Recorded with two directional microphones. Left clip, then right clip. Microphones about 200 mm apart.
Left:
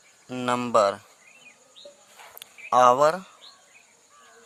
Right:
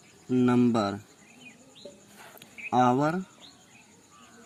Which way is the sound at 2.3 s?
40° left (ahead or behind).